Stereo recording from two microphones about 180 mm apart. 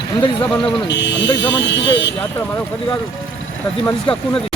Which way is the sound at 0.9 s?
80° left.